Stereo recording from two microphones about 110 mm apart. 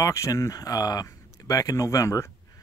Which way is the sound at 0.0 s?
30° left (ahead or behind).